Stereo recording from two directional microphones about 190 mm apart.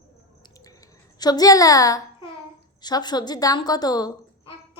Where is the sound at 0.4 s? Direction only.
15° left (ahead or behind).